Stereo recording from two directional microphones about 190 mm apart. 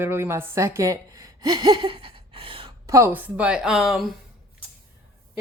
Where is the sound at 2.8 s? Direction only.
15° right (ahead or behind).